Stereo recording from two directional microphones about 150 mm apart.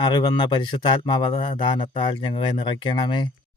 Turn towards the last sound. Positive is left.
turn(degrees=30)  # may be behind; listen again after turning